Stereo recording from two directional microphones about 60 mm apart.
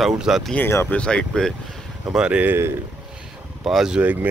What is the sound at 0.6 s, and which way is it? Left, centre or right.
Speech, left.